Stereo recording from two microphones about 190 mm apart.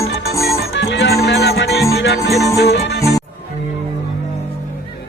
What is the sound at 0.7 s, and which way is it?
Music, 70° left (ahead or behind).